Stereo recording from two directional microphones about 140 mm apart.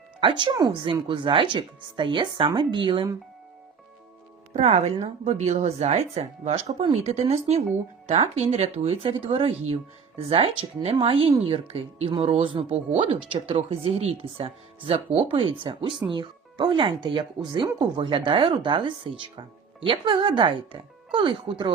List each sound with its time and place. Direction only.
0.2 s speech: 35° right (ahead or behind)
4.5 s speech: 50° right (ahead or behind)
4.9 s speech: 30° right (ahead or behind)
5.2 s speech: 50° right (ahead or behind)